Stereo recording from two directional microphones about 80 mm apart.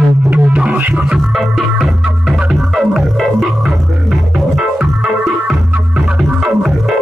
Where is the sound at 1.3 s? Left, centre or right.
Centre.